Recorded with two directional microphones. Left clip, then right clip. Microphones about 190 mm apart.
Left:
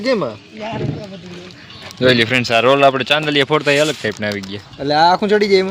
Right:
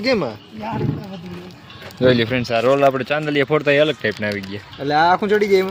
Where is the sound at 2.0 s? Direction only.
5° right (ahead or behind).